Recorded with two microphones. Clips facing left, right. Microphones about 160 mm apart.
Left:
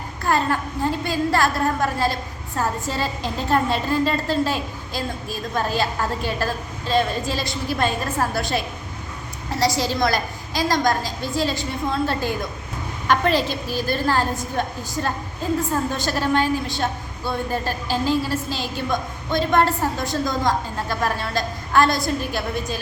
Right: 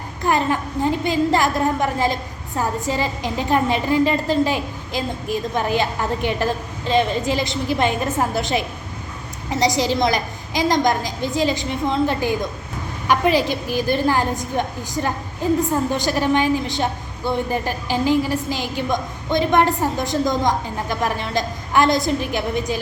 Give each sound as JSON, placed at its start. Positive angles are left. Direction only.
{"t": 0.2, "sound": "a woman's voice", "side_deg": -15}